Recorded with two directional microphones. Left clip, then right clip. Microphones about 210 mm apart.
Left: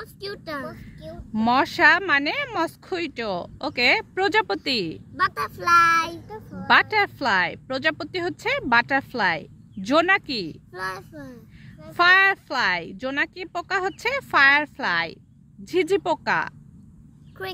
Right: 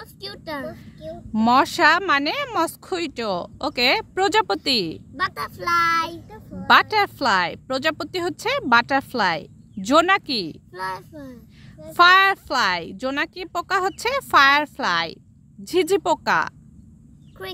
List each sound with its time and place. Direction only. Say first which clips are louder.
0.0 s a sound: left 1 dB; 5° right (ahead or behind)
0.7 s a sound: right 1 dB; 15° right (ahead or behind)
1.3 s speech: right 3 dB; 15° right (ahead or behind)
5.1 s speech: left 3 dB; 5° right (ahead or behind)
6.7 s speech: right 2 dB; 15° right (ahead or behind)
10.7 s speech: right 2 dB; 5° right (ahead or behind)
11.9 s speech: right 3 dB; 15° right (ahead or behind)
17.4 s speech: left 1 dB; centre (ahead or behind)